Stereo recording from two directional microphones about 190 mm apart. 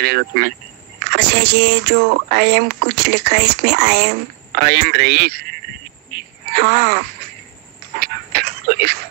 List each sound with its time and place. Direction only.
0.0 s speech: 55° right (ahead or behind)
6.1 s wail: 55° right (ahead or behind)
8.0 s a sound: 55° right (ahead or behind)